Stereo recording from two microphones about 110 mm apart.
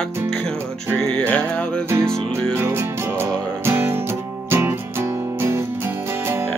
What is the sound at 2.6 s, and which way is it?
Music, 20° right (ahead or behind).